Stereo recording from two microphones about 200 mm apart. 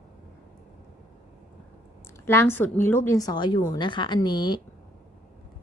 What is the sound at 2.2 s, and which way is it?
A woman's voice, 10° left (ahead or behind).